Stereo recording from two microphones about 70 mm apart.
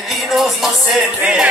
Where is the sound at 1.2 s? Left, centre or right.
Centre.